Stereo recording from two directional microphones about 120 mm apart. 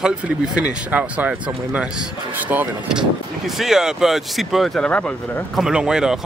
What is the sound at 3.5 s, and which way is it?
Speech, 5° right (ahead or behind).